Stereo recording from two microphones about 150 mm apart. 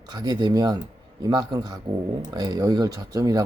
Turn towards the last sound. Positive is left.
turn(degrees=-25)  # may be behind; listen again after turning